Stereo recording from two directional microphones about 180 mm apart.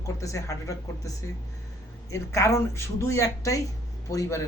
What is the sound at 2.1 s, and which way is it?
Speech, 15° left (ahead or behind).